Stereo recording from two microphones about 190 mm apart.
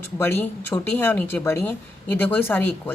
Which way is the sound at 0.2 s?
10° left (ahead or behind).